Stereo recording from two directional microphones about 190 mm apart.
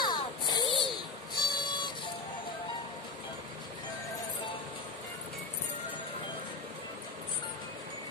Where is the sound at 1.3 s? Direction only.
25° left (ahead or behind).